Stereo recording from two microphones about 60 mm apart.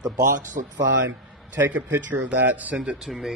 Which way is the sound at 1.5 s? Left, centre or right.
Right.